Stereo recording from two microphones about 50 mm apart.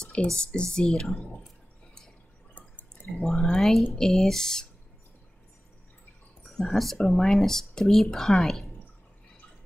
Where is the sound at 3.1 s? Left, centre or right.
Centre.